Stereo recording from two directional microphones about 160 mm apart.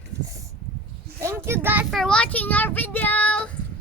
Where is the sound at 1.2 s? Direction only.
15° right (ahead or behind).